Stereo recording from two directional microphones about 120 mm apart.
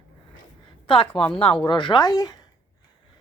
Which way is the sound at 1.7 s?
40° left (ahead or behind).